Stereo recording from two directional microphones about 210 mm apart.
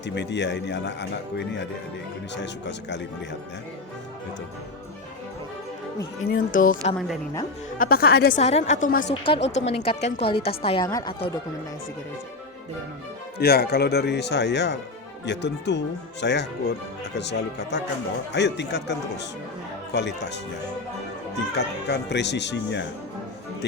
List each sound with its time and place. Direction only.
0.0 s speech: 55° left (ahead or behind)
6.3 s a woman's voice: 40° left (ahead or behind)
8.4 s a woman's voice: 30° left (ahead or behind)
13.4 s speech: 45° left (ahead or behind)
21.5 s speech: 55° left (ahead or behind)